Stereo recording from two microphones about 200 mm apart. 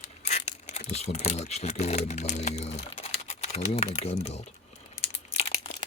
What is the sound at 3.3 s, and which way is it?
Speech, 35° left (ahead or behind).